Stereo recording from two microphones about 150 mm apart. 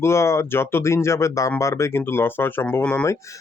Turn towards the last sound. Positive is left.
turn(degrees=10)  # may be behind; listen again after turning